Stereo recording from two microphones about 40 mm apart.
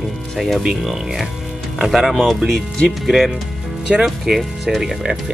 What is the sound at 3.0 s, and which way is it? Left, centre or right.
Speech, centre.